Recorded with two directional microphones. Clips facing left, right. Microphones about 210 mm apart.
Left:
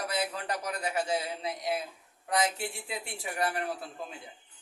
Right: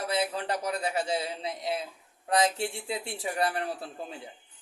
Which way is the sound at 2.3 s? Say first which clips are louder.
Right 4 dB; 30° right (ahead or behind).